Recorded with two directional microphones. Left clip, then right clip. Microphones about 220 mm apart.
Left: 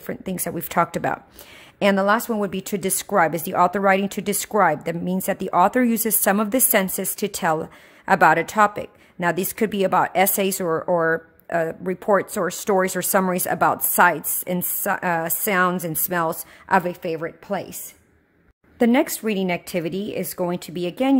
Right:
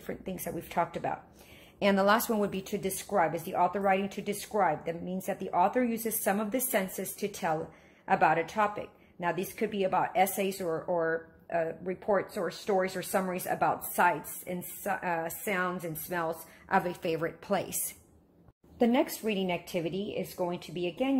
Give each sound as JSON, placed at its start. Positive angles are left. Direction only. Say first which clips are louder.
{"t": 0.0, "sound": "a woman's voice", "louder": "left 9 dB", "side_deg": 35}
{"t": 1.8, "sound": "speech", "louder": "left 7 dB", "side_deg": 30}
{"t": 2.6, "sound": "a woman's voice", "louder": "left 9 dB", "side_deg": 40}
{"t": 18.8, "sound": "a woman's voice", "louder": "left 8 dB", "side_deg": 30}